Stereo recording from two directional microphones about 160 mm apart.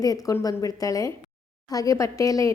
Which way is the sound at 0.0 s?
20° left (ahead or behind).